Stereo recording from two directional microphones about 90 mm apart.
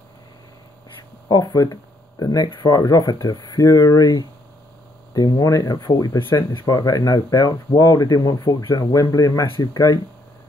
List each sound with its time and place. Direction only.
1.3 s speech: 40° left (ahead or behind)